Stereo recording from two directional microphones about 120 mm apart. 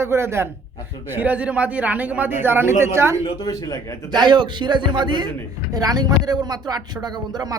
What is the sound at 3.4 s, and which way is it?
Speech, 30° left (ahead or behind).